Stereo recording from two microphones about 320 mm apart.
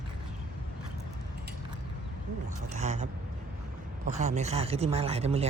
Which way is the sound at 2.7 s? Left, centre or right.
Right.